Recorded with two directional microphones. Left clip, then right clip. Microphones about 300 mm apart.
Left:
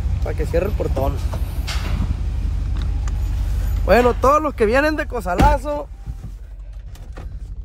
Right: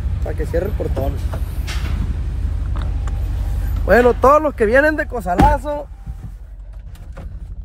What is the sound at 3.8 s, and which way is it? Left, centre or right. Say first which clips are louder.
Speech: right 3 dB; centre.